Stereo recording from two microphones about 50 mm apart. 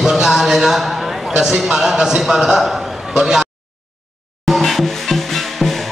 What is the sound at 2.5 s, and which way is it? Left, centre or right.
Speech, centre.